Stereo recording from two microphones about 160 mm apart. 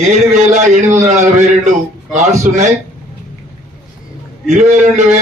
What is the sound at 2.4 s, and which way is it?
Speech, 50° right (ahead or behind).